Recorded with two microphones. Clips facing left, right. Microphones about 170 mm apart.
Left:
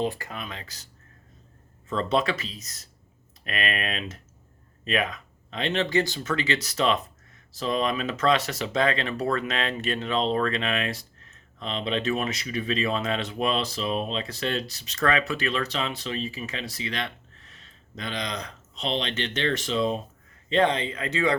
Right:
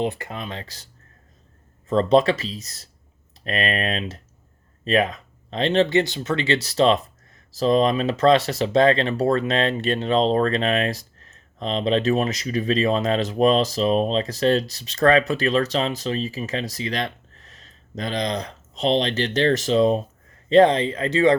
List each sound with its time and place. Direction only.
0.0 s speech: 20° right (ahead or behind)
1.9 s speech: 35° right (ahead or behind)